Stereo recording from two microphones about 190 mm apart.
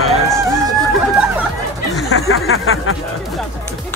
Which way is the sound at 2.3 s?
90° left.